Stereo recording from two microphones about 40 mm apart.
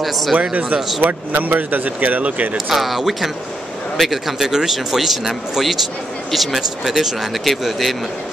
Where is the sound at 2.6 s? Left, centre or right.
Centre.